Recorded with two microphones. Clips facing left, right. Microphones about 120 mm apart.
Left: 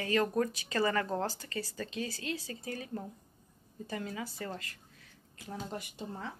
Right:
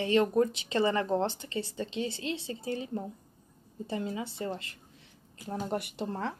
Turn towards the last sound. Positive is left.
turn(degrees=-75)  # may be behind; listen again after turning